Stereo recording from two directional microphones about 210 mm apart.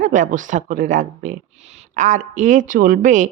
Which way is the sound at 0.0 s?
35° right (ahead or behind).